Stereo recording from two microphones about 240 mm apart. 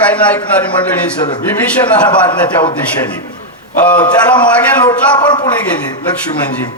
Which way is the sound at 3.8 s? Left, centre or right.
Centre.